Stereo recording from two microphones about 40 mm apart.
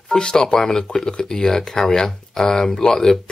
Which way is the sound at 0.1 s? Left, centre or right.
Centre.